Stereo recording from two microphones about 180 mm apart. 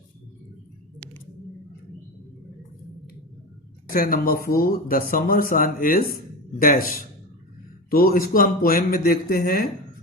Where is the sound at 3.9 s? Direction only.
55° left (ahead or behind).